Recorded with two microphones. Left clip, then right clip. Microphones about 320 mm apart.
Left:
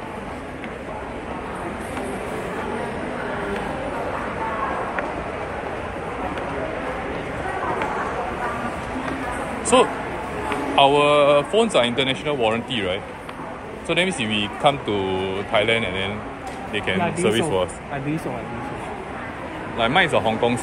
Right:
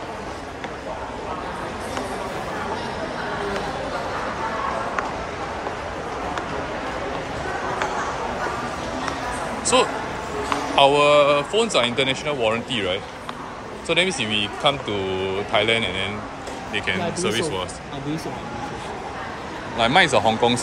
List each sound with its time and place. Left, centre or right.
9.7 s speech: centre
17.2 s speech: centre
19.8 s speech: centre